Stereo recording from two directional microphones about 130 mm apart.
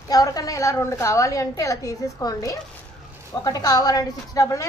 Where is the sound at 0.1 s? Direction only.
30° left (ahead or behind).